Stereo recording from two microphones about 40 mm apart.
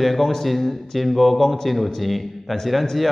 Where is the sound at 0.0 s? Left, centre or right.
Centre.